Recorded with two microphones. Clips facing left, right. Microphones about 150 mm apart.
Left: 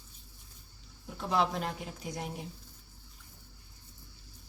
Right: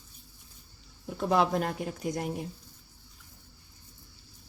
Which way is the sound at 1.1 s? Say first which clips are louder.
Right 5 dB; 50° right (ahead or behind).